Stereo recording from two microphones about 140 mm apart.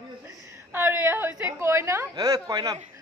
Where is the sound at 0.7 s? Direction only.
15° right (ahead or behind).